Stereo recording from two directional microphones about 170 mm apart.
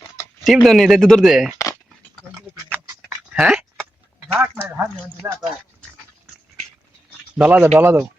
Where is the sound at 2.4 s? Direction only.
15° right (ahead or behind).